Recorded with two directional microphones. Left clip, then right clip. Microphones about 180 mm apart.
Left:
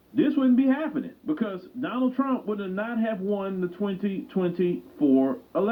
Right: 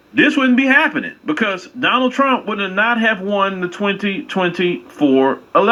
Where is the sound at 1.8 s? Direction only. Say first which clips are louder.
Right 13 dB; 90° right.